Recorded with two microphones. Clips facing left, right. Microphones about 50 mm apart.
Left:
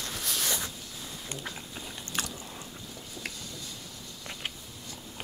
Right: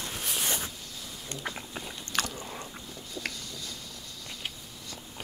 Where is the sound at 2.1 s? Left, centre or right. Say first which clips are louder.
Right 4 dB; right.